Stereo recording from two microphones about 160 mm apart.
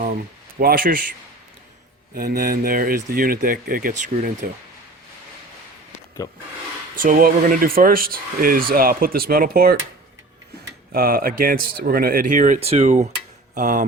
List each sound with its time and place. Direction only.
0.6 s speech: 65° right (ahead or behind)
2.1 s speech: 65° right (ahead or behind); by 4.4 s 50° right (ahead or behind)
6.2 s speech: 20° left (ahead or behind)
6.9 s speech: 60° right (ahead or behind)
10.9 s speech: 65° right (ahead or behind)
12.5 s cutlery: 40° right (ahead or behind)